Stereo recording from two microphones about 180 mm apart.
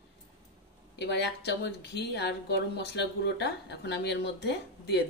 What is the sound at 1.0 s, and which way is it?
A woman's voice, 70° left (ahead or behind).